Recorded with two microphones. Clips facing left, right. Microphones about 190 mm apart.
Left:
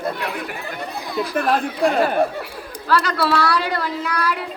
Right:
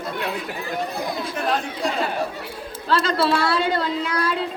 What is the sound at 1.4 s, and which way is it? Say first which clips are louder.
Speech: left 6 dB; 55° left (ahead or behind).